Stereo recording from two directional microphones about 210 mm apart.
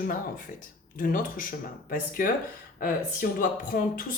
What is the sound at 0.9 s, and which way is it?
Speech, 40° left (ahead or behind).